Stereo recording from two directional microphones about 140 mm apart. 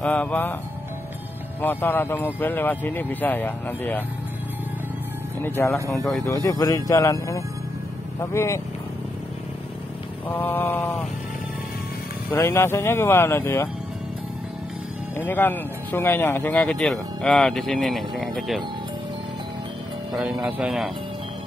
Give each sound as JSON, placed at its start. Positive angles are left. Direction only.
{"t": 0.0, "sound": "speech", "side_deg": 10}
{"t": 1.6, "sound": "speech", "side_deg": 15}
{"t": 5.4, "sound": "speech", "side_deg": 15}
{"t": 6.5, "sound": "speech", "side_deg": 25}
{"t": 10.2, "sound": "speech", "side_deg": 15}
{"t": 12.3, "sound": "speech", "side_deg": 20}
{"t": 15.1, "sound": "speech", "side_deg": 15}
{"t": 16.5, "sound": "speech", "side_deg": 5}
{"t": 20.4, "sound": "speech", "side_deg": -10}